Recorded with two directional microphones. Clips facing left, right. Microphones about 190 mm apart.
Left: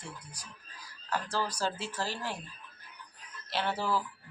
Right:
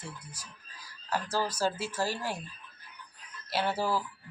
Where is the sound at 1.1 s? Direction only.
5° right (ahead or behind).